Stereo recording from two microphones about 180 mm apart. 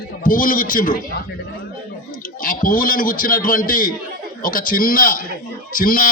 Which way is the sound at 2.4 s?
50° left (ahead or behind).